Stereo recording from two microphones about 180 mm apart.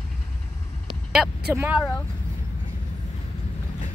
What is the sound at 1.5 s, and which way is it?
Speech, 10° right (ahead or behind).